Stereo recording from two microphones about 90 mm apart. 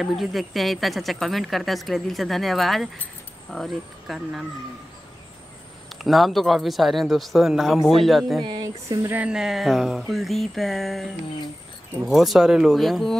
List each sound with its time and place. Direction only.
0.0 s speech: centre (ahead or behind)
6.0 s speech: centre (ahead or behind)
8.5 s speech: 55° right (ahead or behind)
9.1 s speech: 10° right (ahead or behind)
12.1 s speech: centre (ahead or behind)